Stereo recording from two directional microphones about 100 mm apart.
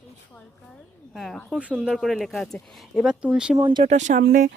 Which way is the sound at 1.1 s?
Centre (ahead or behind).